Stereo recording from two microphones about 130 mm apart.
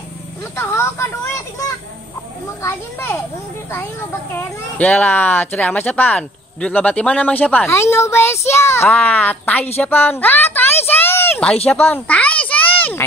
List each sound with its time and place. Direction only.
0.6 s a child's voice: 20° left (ahead or behind)
2.6 s a child's voice: 20° left (ahead or behind)
4.3 s speech: 15° left (ahead or behind)
8.8 s speech: 10° left (ahead or behind)
11.6 s a sound: 15° left (ahead or behind)